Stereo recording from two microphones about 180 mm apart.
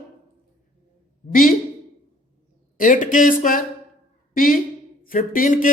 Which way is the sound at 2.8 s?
45° left (ahead or behind).